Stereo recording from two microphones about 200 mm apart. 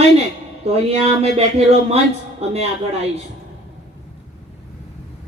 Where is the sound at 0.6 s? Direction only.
30° right (ahead or behind).